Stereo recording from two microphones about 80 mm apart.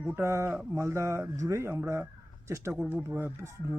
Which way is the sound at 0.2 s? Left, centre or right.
Right.